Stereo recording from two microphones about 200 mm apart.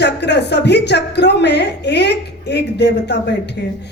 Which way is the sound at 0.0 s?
55° left (ahead or behind).